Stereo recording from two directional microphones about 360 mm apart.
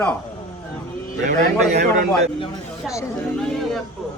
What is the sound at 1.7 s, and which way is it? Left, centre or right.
Speech, right.